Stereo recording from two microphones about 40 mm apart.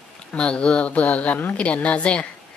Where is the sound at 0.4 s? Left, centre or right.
Left.